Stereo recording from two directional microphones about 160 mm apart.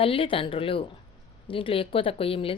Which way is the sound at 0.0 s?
35° left (ahead or behind).